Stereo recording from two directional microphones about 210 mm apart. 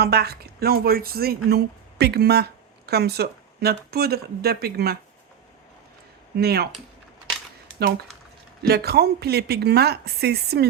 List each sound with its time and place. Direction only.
0.0 s speech: 50° right (ahead or behind)
6.3 s speech: 50° right (ahead or behind)
8.6 s speech: 50° right (ahead or behind)